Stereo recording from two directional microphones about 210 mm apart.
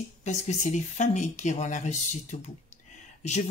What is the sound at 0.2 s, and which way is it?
Speech, 35° left (ahead or behind).